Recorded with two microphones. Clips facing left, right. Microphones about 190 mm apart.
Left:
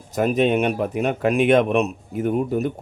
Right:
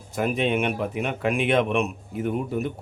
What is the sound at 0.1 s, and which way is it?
A man's voice, 40° left (ahead or behind).